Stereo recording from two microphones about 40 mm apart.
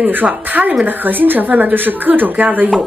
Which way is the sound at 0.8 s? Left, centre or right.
Right.